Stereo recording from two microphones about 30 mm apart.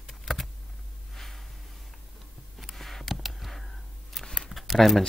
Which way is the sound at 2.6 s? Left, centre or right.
Centre.